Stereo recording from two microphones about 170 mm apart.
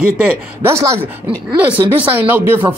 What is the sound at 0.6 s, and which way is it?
A man's voice, 15° right (ahead or behind).